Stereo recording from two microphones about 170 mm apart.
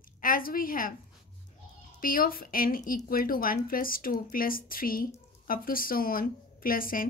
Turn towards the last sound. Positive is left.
turn(degrees=55)  # may be behind; listen again after turning